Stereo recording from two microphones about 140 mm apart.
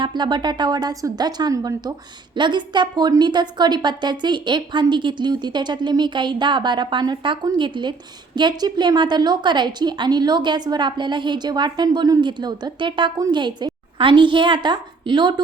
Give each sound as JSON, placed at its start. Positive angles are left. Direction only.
{"t": 0.0, "sound": "a woman's voice", "side_deg": -30}